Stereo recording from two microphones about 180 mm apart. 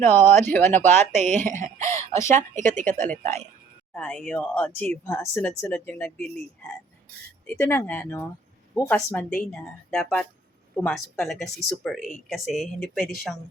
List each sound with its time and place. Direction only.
0.0 s speech: 45° right (ahead or behind)
0.4 s speech: 10° left (ahead or behind)
0.7 s speech: 40° right (ahead or behind)
1.6 s cough: 15° left (ahead or behind)
2.3 s speech: 45° right (ahead or behind)
2.8 s speech: 10° left (ahead or behind)